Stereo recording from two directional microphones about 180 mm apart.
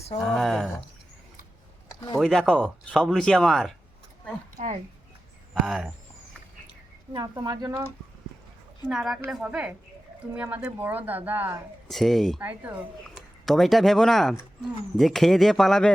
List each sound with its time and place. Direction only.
0.3 s speech: centre (ahead or behind)
1.9 s a sound: 25° left (ahead or behind)
2.1 s speech: centre (ahead or behind)
4.5 s speech: 45° right (ahead or behind)
5.6 s speech: 5° right (ahead or behind)
7.1 s speech: 25° right (ahead or behind)
8.9 s speech: centre (ahead or behind)
11.9 s speech: centre (ahead or behind)
12.4 s speech: 10° right (ahead or behind)
13.4 s speech: centre (ahead or behind)